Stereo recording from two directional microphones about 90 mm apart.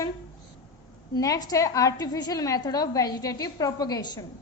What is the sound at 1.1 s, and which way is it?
A woman's voice, 40° left (ahead or behind).